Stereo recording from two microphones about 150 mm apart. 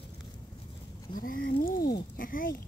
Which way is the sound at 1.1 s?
70° left (ahead or behind).